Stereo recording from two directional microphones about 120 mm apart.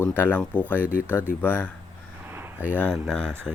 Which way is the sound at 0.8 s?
15° right (ahead or behind).